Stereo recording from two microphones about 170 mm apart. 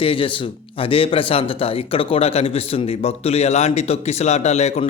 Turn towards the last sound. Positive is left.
turn(degrees=40)  # may be behind; listen again after turning